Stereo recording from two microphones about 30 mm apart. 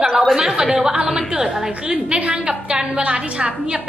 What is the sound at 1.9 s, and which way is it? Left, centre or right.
A woman's voice, right.